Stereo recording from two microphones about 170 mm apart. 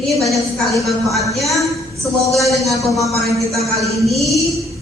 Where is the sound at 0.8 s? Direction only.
Centre (ahead or behind).